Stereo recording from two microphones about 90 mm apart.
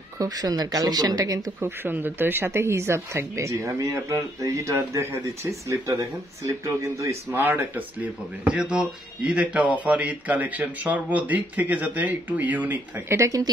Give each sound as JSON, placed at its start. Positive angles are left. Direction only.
{"t": 0.2, "sound": "speech", "side_deg": -45}
{"t": 1.6, "sound": "speech", "side_deg": -25}
{"t": 7.3, "sound": "speech", "side_deg": -20}